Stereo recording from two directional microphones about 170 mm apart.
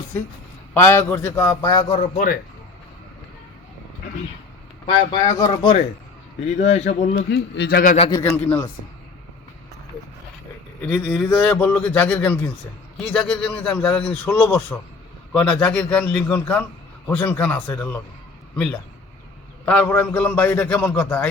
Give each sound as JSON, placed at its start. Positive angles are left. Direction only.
{"t": 0.7, "sound": "a man's voice", "side_deg": 15}
{"t": 2.0, "sound": "speech", "side_deg": 50}
{"t": 4.9, "sound": "speech", "side_deg": 20}
{"t": 6.4, "sound": "speech", "side_deg": 40}
{"t": 7.3, "sound": "a man's voice", "side_deg": 90}
{"t": 8.2, "sound": "a man's voice", "side_deg": 15}
{"t": 10.8, "sound": "a man's voice", "side_deg": 5}